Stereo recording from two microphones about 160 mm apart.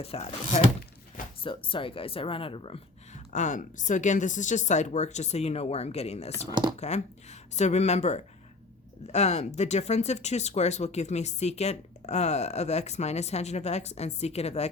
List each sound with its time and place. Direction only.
0.0 s speech: 40° left (ahead or behind)
6.5 s speech: 30° right (ahead or behind)
6.7 s speech: 45° left (ahead or behind)